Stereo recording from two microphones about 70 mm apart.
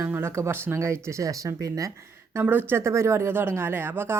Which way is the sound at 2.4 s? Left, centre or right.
Right.